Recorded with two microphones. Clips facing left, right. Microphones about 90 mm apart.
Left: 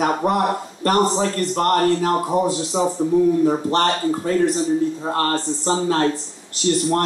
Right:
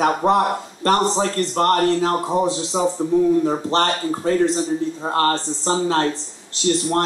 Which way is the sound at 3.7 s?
25° right (ahead or behind).